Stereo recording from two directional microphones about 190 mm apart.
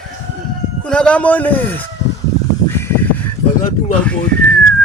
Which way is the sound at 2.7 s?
10° left (ahead or behind).